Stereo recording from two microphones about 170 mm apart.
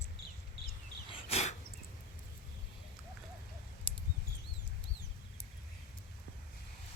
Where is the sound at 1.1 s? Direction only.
40° left (ahead or behind).